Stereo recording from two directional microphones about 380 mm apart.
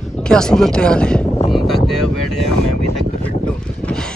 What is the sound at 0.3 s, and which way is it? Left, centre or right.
Vehicle, centre.